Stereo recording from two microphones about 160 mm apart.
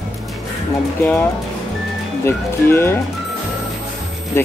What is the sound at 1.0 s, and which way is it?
Speech, 10° left (ahead or behind).